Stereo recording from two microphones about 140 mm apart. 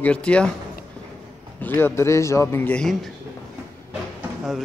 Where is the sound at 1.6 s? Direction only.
15° left (ahead or behind).